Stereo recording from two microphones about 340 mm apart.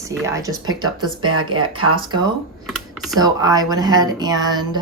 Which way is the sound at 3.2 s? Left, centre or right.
Centre.